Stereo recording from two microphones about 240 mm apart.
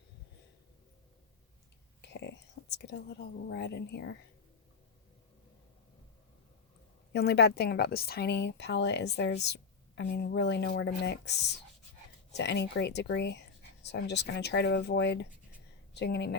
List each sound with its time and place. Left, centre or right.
2.0 s speech: left
7.1 s a woman's voice: left